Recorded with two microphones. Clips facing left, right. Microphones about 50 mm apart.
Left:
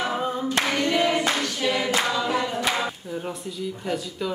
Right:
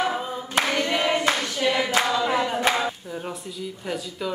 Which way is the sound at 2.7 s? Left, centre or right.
Centre.